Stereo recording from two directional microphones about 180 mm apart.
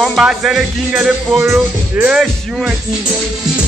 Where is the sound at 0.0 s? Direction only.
Centre (ahead or behind).